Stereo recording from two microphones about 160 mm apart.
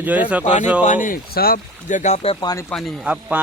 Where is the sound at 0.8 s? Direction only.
55° left (ahead or behind); by 2.5 s 35° left (ahead or behind).